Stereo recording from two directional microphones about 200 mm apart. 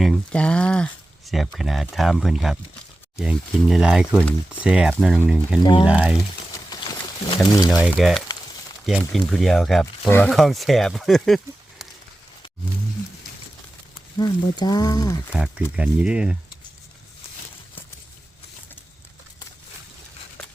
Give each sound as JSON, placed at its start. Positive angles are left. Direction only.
{"t": 0.0, "sound": "speech", "side_deg": 5}
{"t": 5.6, "sound": "speech", "side_deg": 25}
{"t": 5.9, "sound": "speech", "side_deg": -5}
{"t": 6.7, "sound": "a sound", "side_deg": 20}
{"t": 7.4, "sound": "speech", "side_deg": 20}
{"t": 7.9, "sound": "speech", "side_deg": 0}
{"t": 14.2, "sound": "speech", "side_deg": 20}
{"t": 15.3, "sound": "speech", "side_deg": -5}